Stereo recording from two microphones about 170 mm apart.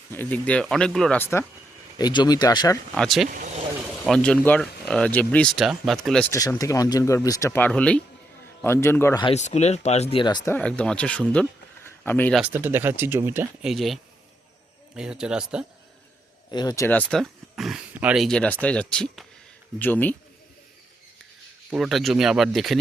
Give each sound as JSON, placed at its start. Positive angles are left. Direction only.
{"t": 0.1, "sound": "speech", "side_deg": 10}
{"t": 2.0, "sound": "speech", "side_deg": 25}
{"t": 2.9, "sound": "speech", "side_deg": 0}
{"t": 3.2, "sound": "speech", "side_deg": -50}
{"t": 4.0, "sound": "speech", "side_deg": 5}
{"t": 6.3, "sound": "speech", "side_deg": 20}
{"t": 9.2, "sound": "speech", "side_deg": 40}
{"t": 10.5, "sound": "speech", "side_deg": 5}
{"t": 12.4, "sound": "speech", "side_deg": -10}
{"t": 16.5, "sound": "speech", "side_deg": 25}
{"t": 21.7, "sound": "speech", "side_deg": 0}